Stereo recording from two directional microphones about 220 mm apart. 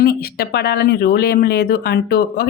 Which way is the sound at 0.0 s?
45° left (ahead or behind).